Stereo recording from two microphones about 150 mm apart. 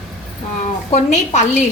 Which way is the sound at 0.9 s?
50° left (ahead or behind).